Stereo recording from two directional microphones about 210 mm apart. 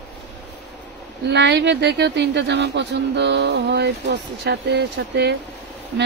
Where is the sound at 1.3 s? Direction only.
55° right (ahead or behind).